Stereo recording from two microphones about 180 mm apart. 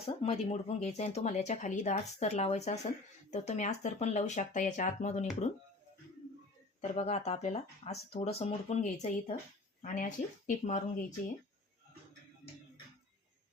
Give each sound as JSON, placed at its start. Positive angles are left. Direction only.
{"t": 0.2, "sound": "speech", "side_deg": 35}
{"t": 6.9, "sound": "speech", "side_deg": 35}